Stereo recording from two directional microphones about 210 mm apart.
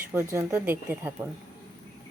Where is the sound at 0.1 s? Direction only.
10° right (ahead or behind).